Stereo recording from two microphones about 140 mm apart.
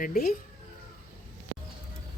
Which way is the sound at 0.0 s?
85° left.